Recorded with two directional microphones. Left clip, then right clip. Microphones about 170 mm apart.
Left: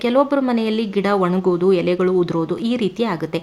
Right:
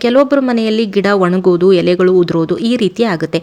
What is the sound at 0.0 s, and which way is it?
Speech, 25° right (ahead or behind).